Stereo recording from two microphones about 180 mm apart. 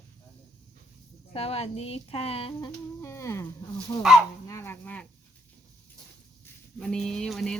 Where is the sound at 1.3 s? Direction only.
35° left (ahead or behind); by 3.4 s 15° left (ahead or behind).